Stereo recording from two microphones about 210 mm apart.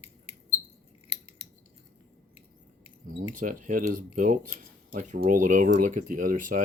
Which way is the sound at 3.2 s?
40° right (ahead or behind).